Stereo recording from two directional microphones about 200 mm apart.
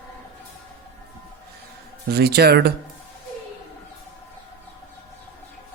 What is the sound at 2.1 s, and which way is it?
Speech, 55° right (ahead or behind).